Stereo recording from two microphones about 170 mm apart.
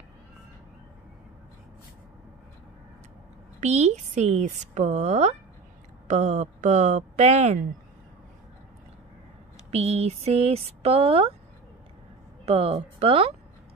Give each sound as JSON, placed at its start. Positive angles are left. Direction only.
{"t": 3.6, "sound": "speech", "side_deg": -40}
{"t": 9.7, "sound": "speech", "side_deg": -40}
{"t": 12.4, "sound": "speech", "side_deg": -35}